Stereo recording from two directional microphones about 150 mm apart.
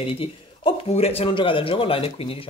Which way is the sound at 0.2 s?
40° left (ahead or behind).